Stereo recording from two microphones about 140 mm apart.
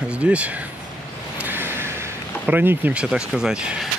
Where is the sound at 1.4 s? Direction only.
15° right (ahead or behind).